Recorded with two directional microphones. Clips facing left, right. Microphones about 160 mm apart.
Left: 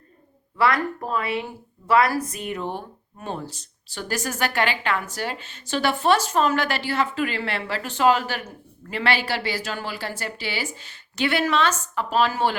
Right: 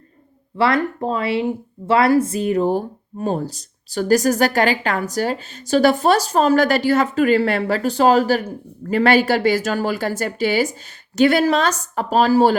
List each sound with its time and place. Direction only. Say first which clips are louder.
0.5 s a woman's voice: right 4 dB; 30° right (ahead or behind)